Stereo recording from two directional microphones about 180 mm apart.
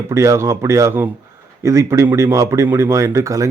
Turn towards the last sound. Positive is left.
turn(degrees=-15)  # may be behind; listen again after turning